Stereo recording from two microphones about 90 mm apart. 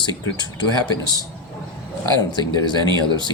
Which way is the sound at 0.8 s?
45° left (ahead or behind).